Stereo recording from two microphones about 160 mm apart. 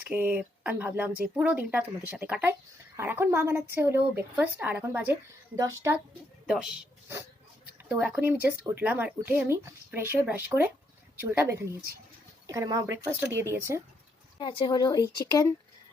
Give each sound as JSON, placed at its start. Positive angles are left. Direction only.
{"t": 0.0, "sound": "speech", "side_deg": -10}
{"t": 6.5, "sound": "speech", "side_deg": -5}
{"t": 7.9, "sound": "speech", "side_deg": -5}
{"t": 14.3, "sound": "speech", "side_deg": 30}